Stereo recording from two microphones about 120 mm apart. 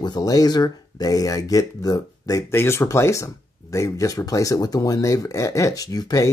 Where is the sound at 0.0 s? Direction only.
35° left (ahead or behind).